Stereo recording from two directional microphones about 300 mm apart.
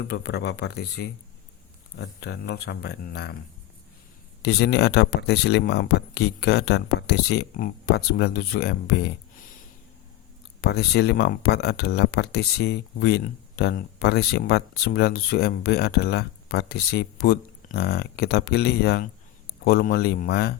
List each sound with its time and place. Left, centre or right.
0.0 s speech: left
4.4 s speech: left
10.6 s speech: left